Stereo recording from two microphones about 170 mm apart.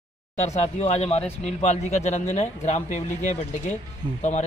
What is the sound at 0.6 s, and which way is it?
Speech, 40° left (ahead or behind).